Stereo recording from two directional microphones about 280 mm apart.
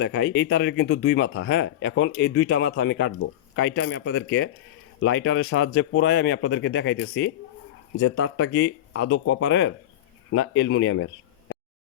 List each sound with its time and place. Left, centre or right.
0.0 s speech: left